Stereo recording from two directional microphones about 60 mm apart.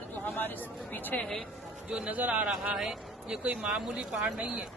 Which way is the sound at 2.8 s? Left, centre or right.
Centre.